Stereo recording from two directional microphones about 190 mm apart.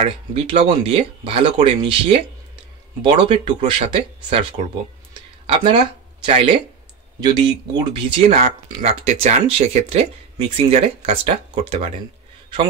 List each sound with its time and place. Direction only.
0.0 s speech: 30° right (ahead or behind)
5.5 s speech: 25° right (ahead or behind)